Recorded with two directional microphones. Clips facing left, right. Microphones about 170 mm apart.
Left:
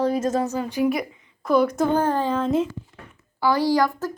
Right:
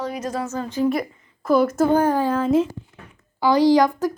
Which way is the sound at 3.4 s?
20° right (ahead or behind).